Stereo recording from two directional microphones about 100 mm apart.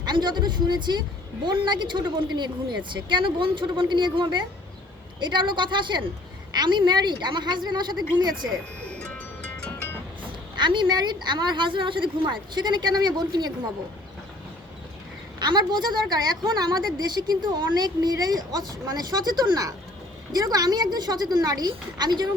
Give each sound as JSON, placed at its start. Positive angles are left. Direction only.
{"t": 0.0, "sound": "a woman's voice", "side_deg": -50}
{"t": 8.9, "sound": "music", "side_deg": 15}
{"t": 10.6, "sound": "a woman's voice", "side_deg": -50}
{"t": 15.4, "sound": "a woman's voice", "side_deg": -45}